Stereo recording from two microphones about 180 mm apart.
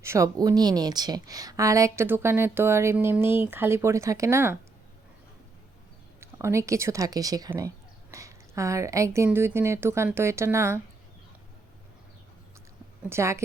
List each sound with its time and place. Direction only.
0.0 s a woman's voice: 15° right (ahead or behind)
6.1 s a woman's voice: 15° right (ahead or behind)
13.0 s speech: 15° right (ahead or behind)